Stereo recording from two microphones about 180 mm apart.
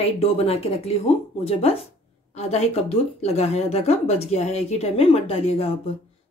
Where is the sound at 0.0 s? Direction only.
35° left (ahead or behind).